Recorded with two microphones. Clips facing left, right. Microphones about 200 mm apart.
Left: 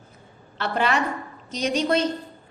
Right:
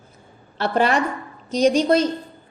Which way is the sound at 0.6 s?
40° right (ahead or behind).